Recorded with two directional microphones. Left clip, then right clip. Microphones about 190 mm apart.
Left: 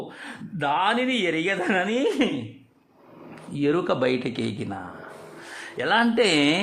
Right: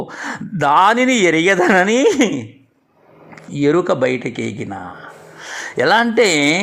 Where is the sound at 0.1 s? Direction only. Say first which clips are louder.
Right 12 dB; 35° right (ahead or behind).